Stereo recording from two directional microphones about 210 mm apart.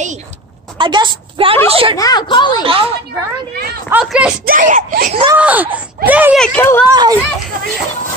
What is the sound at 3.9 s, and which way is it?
Speech, 5° right (ahead or behind).